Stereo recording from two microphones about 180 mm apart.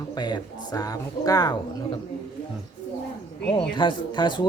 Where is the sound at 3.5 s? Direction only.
25° left (ahead or behind).